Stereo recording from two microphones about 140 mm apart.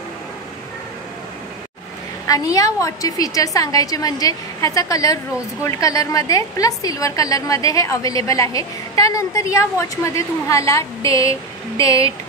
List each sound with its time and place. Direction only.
2.2 s a woman's voice: 25° left (ahead or behind)